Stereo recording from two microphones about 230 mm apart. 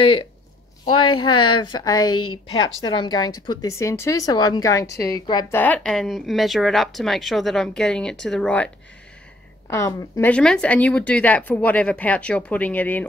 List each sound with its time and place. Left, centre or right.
0.0 s a woman's voice: left
0.8 s a woman's voice: left
1.3 s a woman's voice: centre
9.7 s speech: centre